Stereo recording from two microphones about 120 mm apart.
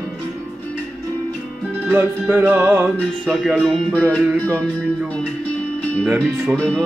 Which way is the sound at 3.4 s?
5° right (ahead or behind).